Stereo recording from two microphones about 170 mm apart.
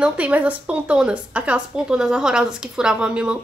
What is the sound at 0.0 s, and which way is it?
A woman's voice, 10° right (ahead or behind).